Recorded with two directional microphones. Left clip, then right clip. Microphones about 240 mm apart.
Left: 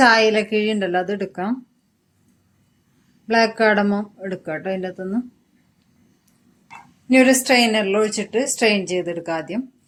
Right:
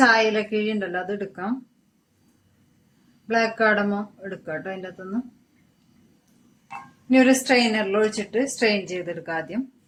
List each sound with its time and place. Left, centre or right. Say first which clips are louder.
0.0 s speech: left 4 dB; left
3.2 s speech: left 4 dB; left
7.1 s speech: left 3 dB; left